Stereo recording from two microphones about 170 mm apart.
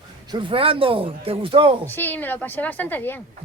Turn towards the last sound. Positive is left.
turn(degrees=10)  # may be behind; listen again after turning